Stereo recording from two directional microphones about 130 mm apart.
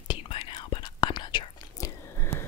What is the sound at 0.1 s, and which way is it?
Whispering, 40° left (ahead or behind).